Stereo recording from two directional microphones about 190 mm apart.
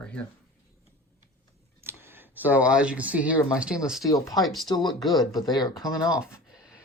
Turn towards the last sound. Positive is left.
turn(degrees=20)  # may be behind; listen again after turning